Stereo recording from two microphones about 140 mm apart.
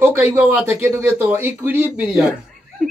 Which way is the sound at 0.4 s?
15° right (ahead or behind).